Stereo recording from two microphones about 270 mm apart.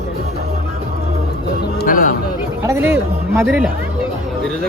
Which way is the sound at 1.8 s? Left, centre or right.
Left.